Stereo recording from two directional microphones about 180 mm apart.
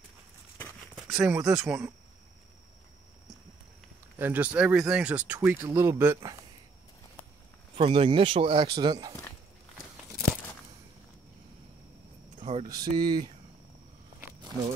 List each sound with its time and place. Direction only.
0.9 s speech: 5° right (ahead or behind)
4.2 s speech: 10° right (ahead or behind)
7.7 s speech: 30° right (ahead or behind)
9.9 s crumpling: 5° right (ahead or behind)
12.4 s a sound: 35° right (ahead or behind)
12.9 s speech: 25° right (ahead or behind)